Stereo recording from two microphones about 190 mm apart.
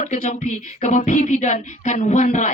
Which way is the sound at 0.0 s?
40° left (ahead or behind).